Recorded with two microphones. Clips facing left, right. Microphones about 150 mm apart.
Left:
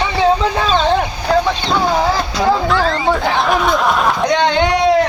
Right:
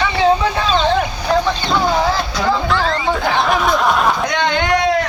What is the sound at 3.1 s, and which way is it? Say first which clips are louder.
Chatter: left 1 dB; centre (ahead or behind).